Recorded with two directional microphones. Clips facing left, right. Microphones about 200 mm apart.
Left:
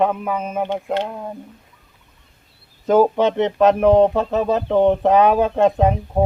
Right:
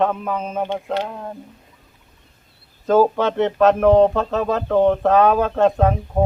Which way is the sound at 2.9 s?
15° left (ahead or behind).